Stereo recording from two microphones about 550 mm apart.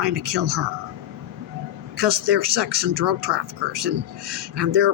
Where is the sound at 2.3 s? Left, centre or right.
Right.